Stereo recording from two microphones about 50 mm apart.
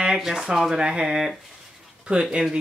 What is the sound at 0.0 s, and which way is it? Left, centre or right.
Speech, centre.